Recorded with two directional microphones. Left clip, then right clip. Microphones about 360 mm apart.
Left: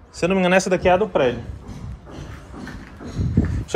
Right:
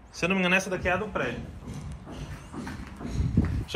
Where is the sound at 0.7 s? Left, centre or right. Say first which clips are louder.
Left 11 dB; left.